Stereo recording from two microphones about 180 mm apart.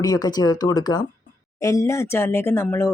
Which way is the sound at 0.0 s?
20° left (ahead or behind).